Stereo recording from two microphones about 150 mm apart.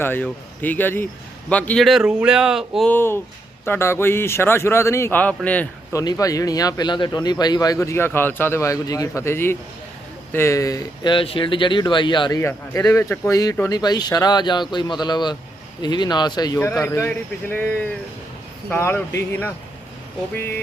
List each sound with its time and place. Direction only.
0.0 s speech: 10° left (ahead or behind)
2.9 s speech: 15° left (ahead or behind)
5.9 s speech: 20° left (ahead or behind)
12.4 s speech: 20° left (ahead or behind)